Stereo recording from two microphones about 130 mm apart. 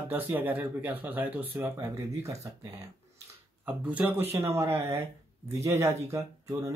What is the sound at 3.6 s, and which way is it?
Speech, 10° right (ahead or behind).